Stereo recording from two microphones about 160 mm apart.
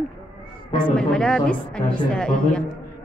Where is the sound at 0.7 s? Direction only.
30° left (ahead or behind).